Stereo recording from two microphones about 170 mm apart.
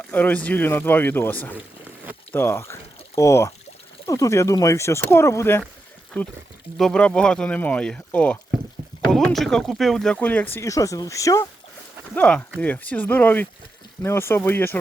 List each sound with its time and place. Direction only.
0.1 s speech: 10° left (ahead or behind)
6.7 s speech: 5° left (ahead or behind)